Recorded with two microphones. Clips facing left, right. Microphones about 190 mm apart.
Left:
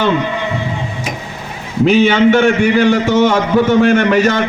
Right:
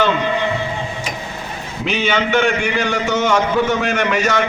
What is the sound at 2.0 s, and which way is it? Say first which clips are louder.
A man's voice: left 7 dB; 55° left (ahead or behind).